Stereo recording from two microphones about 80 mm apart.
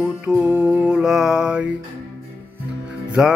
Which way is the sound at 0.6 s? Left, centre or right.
Centre.